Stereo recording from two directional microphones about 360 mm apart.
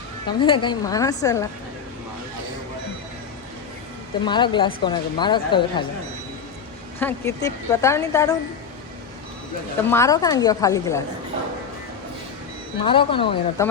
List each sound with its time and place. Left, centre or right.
0.3 s a woman's voice: centre
4.3 s a woman's voice: centre
7.0 s a woman's voice: centre
9.9 s a woman's voice: centre
12.8 s a woman's voice: centre